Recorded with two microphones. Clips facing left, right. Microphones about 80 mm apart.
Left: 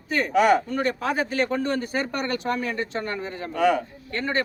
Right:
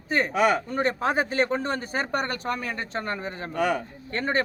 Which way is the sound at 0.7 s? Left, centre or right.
Right.